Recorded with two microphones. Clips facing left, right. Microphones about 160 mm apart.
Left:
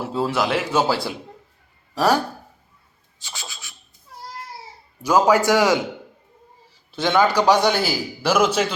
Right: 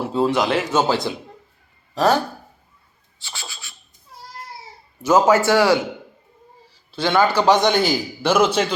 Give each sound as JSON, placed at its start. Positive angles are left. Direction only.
{"t": 0.0, "sound": "a man's voice", "side_deg": 5}
{"t": 3.2, "sound": "scratch", "side_deg": 15}
{"t": 3.5, "sound": "a sound", "side_deg": 15}
{"t": 5.0, "sound": "a man's voice", "side_deg": 10}
{"t": 7.0, "sound": "a man's voice", "side_deg": 15}